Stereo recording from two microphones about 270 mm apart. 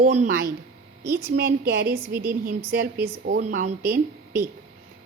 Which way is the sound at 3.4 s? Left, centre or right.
Right.